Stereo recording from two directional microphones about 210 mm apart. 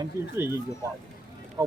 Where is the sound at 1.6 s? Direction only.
15° right (ahead or behind).